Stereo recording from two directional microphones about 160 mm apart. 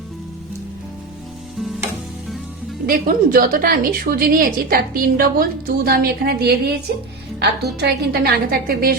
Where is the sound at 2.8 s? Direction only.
65° right (ahead or behind).